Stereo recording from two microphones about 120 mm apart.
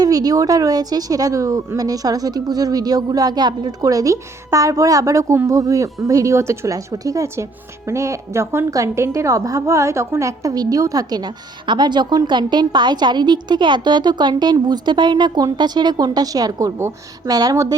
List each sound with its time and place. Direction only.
0.0 s a woman's voice: 35° right (ahead or behind)